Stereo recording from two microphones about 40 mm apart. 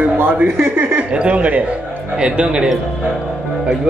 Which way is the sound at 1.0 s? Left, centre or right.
Right.